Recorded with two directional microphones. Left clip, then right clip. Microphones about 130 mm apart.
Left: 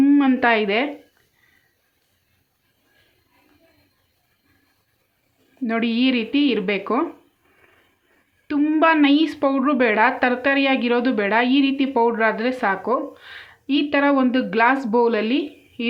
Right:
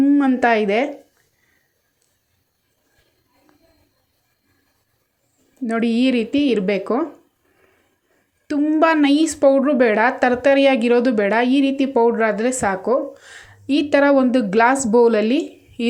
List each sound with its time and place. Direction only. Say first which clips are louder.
0.0 s a sound: even; 15° right (ahead or behind)
0.3 s speech: right 2 dB; 30° right (ahead or behind)
5.6 s a woman's voice: right 2 dB; 30° right (ahead or behind)
8.8 s a woman's voice: right 1 dB; 35° right (ahead or behind)